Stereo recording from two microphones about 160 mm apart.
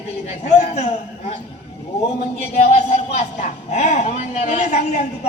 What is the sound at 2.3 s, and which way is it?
Speech, 45° left (ahead or behind).